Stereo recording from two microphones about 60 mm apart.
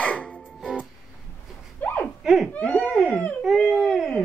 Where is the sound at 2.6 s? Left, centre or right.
Left.